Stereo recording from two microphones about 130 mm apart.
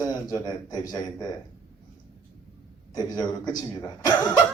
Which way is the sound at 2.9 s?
30° left (ahead or behind).